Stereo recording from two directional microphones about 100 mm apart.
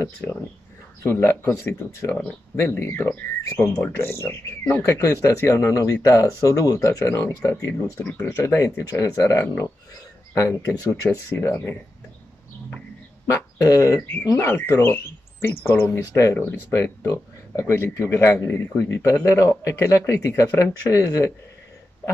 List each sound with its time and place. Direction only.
1.0 s speech: 25° left (ahead or behind)
7.8 s speech: 10° left (ahead or behind)
8.5 s speech: 35° left (ahead or behind)
13.3 s speech: 30° left (ahead or behind)